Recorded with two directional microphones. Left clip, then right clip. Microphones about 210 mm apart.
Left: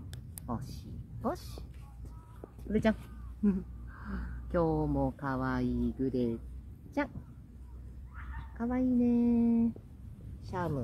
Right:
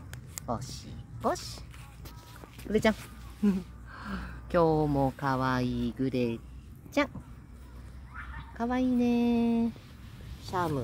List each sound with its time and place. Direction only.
0.5 s speech: 20° right (ahead or behind)
2.7 s speech: 25° right (ahead or behind)
8.5 s speech: 40° right (ahead or behind)